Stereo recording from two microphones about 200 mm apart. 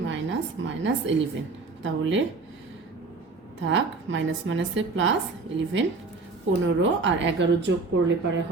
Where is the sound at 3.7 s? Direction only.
70° right (ahead or behind).